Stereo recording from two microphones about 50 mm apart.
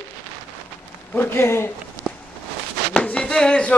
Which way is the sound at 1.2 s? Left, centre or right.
Left.